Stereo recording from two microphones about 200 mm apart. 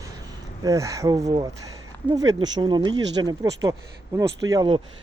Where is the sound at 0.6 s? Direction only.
15° right (ahead or behind).